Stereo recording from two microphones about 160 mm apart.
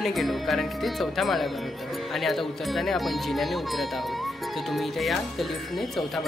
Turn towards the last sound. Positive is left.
turn(degrees=0)  # may be behind; listen again after turning